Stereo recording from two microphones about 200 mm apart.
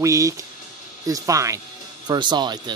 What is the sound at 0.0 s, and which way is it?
Speech, 15° right (ahead or behind).